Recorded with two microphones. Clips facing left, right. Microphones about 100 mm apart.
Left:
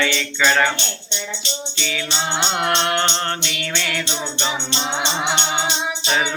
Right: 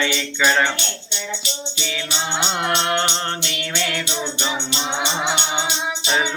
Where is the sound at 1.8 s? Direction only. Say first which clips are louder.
Left 2 dB; 25° right (ahead or behind).